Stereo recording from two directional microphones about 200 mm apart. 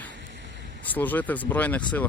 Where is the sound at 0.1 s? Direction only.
65° right (ahead or behind).